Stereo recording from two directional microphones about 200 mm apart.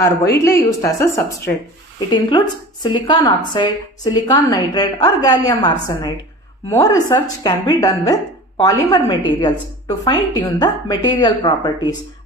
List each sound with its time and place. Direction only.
0.2 s speech: 15° left (ahead or behind)